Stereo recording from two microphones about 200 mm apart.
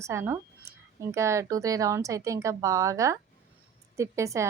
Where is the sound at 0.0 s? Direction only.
15° right (ahead or behind).